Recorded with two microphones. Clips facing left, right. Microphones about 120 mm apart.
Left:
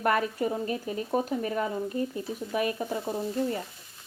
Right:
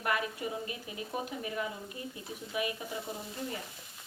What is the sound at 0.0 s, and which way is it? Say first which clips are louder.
Speech: left 7 dB; 45° left (ahead or behind).